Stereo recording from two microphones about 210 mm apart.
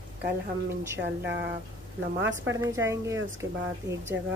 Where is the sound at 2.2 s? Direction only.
60° right (ahead or behind).